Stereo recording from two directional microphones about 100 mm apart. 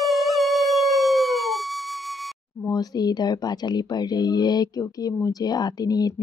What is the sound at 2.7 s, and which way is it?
Speech, 40° left (ahead or behind).